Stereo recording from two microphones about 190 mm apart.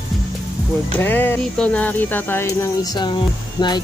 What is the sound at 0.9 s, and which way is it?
Speech, 10° left (ahead or behind).